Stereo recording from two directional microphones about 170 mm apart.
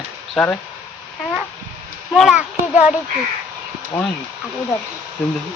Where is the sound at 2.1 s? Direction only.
Centre (ahead or behind).